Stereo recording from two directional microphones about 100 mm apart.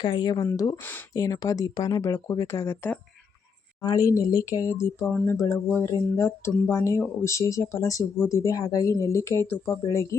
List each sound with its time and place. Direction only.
0.0 s speech: 45° left (ahead or behind); by 2.9 s 25° left (ahead or behind)
3.8 s speech: 35° left (ahead or behind)